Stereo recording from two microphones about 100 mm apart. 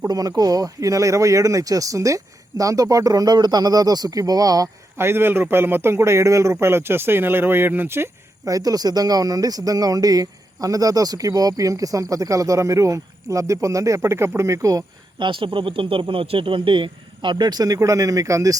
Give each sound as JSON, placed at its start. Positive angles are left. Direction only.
{"t": 0.1, "sound": "speech", "side_deg": -40}
{"t": 4.9, "sound": "a man's voice", "side_deg": -25}
{"t": 8.5, "sound": "speech", "side_deg": -40}
{"t": 15.2, "sound": "speech", "side_deg": -55}